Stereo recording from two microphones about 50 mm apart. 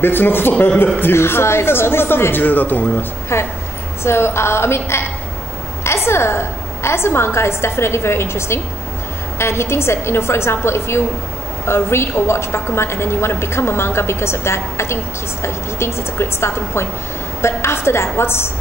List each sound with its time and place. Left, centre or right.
0.0 s a woman's voice: left
2.4 s speech: left
3.3 s a woman's voice: left
6.0 s a woman's voice: left